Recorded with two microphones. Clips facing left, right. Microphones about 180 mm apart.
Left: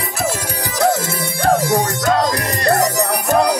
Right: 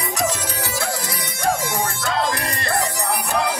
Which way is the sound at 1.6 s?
35° left (ahead or behind).